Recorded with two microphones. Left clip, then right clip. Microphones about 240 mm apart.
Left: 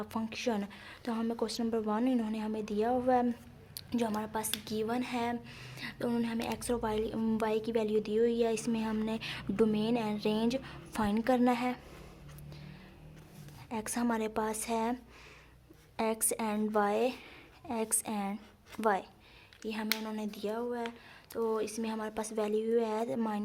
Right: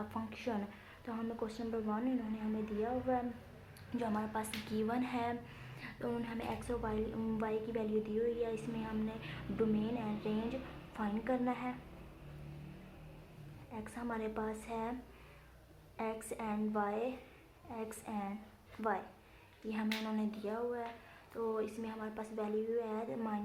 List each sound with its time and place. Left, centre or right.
0.1 s a woman's voice: left
13.7 s a woman's voice: left
16.0 s a woman's voice: left